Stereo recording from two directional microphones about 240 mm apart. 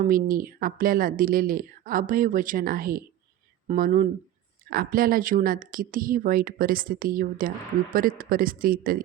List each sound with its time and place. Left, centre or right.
0.0 s speech: right